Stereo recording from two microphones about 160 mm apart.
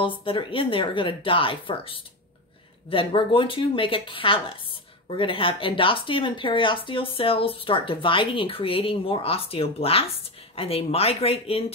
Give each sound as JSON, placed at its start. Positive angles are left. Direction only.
{"t": 0.0, "sound": "speech", "side_deg": 35}